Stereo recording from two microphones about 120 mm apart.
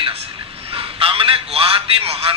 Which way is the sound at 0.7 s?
50° right (ahead or behind).